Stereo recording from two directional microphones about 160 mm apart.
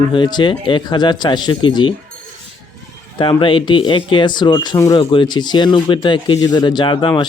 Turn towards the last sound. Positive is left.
turn(degrees=30)  # may be behind; listen again after turning